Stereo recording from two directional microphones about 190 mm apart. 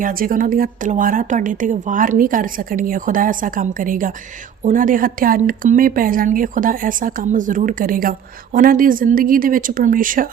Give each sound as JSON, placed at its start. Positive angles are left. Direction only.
{"t": 0.0, "sound": "a woman's voice", "side_deg": -50}